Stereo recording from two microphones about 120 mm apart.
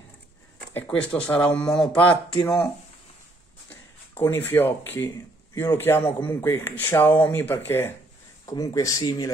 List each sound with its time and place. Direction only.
0.7 s speech: 10° left (ahead or behind)
4.1 s speech: 20° left (ahead or behind)
8.5 s speech: 30° left (ahead or behind)